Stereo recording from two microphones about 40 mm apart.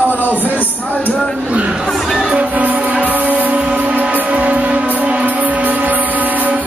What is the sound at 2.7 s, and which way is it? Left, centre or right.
Music, right.